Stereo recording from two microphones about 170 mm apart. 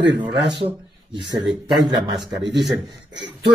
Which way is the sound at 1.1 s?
25° right (ahead or behind).